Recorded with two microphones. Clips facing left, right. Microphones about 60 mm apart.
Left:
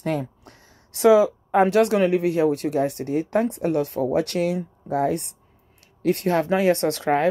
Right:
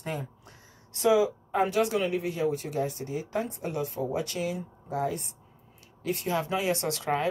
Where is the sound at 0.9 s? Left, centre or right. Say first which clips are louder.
Left 8 dB; left.